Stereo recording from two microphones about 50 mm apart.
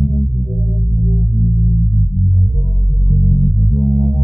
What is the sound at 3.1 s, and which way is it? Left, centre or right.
Music, centre.